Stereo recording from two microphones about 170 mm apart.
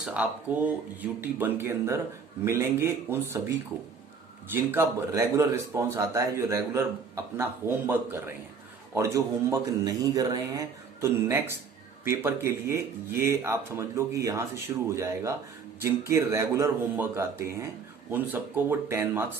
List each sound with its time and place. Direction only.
0.0 s speech: 5° right (ahead or behind)
4.5 s speech: 15° right (ahead or behind)